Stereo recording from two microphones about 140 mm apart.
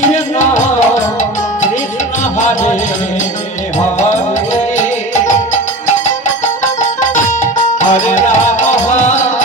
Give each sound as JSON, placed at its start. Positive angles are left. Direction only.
{"t": 7.8, "sound": "music", "side_deg": 60}